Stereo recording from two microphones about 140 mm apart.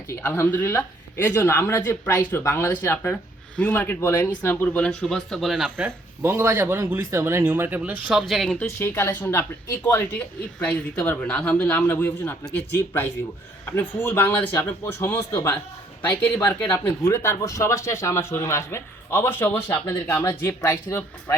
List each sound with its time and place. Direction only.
0.2 s speech: 15° left (ahead or behind)
5.7 s speech: 15° right (ahead or behind); by 8.6 s 5° left (ahead or behind)
8.8 s speech: 20° left (ahead or behind)